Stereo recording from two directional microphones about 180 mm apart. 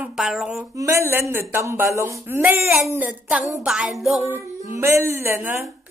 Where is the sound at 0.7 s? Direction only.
15° right (ahead or behind).